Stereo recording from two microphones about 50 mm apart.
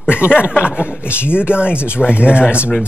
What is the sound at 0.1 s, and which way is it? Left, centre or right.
Speech, left.